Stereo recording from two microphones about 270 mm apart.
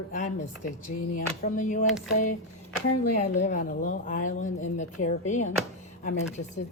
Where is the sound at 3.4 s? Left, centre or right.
Left.